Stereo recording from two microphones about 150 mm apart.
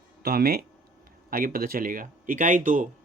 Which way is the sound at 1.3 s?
70° right (ahead or behind).